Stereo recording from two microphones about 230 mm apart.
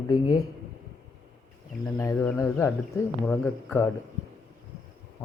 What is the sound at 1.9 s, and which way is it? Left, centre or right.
Speech, centre.